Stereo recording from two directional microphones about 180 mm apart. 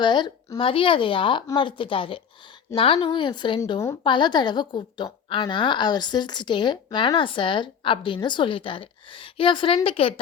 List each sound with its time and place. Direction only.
0.0 s a woman's voice: 25° left (ahead or behind)